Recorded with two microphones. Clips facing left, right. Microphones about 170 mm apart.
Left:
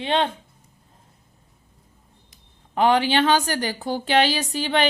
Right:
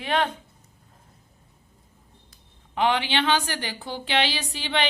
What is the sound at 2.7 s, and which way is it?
A woman's voice, 40° left (ahead or behind).